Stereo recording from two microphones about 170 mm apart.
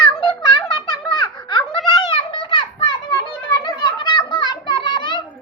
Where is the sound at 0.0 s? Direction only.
25° left (ahead or behind).